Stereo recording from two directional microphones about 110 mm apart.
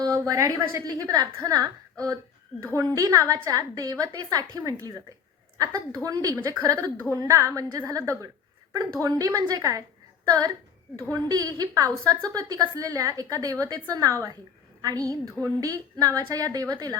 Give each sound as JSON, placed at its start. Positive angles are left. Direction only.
{"t": 0.0, "sound": "a woman's voice", "side_deg": -30}